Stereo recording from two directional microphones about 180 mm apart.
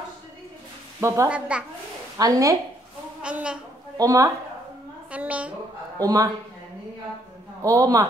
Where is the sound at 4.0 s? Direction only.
20° right (ahead or behind).